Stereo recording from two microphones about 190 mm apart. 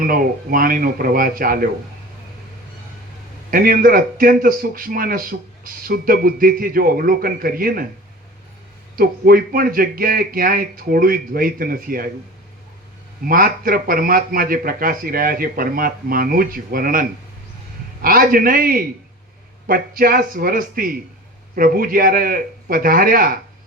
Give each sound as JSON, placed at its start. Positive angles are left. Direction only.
{"t": 0.0, "sound": "a man's voice", "side_deg": -50}
{"t": 3.5, "sound": "a man's voice", "side_deg": -50}
{"t": 9.0, "sound": "a man's voice", "side_deg": -50}
{"t": 13.2, "sound": "a man's voice", "side_deg": -50}